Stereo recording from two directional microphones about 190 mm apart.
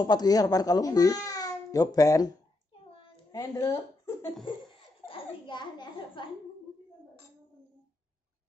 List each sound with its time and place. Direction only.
0.0 s speech: 20° left (ahead or behind)
2.9 s a sound: 25° left (ahead or behind)
5.0 s a child's voice: 25° left (ahead or behind)